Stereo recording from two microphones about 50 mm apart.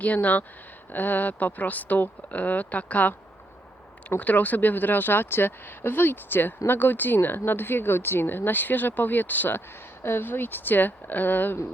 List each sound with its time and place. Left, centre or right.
0.0 s speech: left
4.2 s speech: left
10.0 s speech: left